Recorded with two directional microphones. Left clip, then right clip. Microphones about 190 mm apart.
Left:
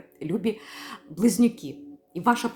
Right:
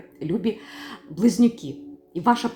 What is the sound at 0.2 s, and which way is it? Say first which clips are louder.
Speech: right 2 dB; 10° left (ahead or behind).